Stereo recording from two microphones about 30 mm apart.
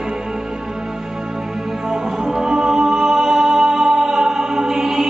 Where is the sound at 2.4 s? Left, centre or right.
Centre.